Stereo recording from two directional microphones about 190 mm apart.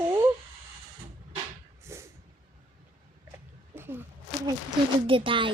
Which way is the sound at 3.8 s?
10° right (ahead or behind).